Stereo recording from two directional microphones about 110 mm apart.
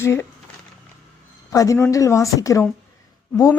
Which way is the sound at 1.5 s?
30° left (ahead or behind).